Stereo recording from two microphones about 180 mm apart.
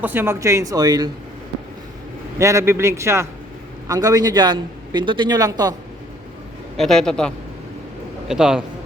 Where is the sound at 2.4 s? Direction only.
15° right (ahead or behind).